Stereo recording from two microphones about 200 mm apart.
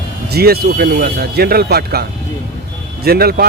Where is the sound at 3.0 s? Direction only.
50° right (ahead or behind).